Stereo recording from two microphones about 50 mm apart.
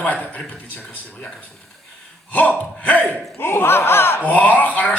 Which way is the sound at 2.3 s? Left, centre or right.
Left.